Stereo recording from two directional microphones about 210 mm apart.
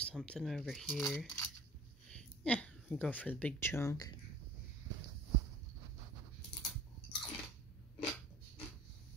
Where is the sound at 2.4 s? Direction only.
5° left (ahead or behind).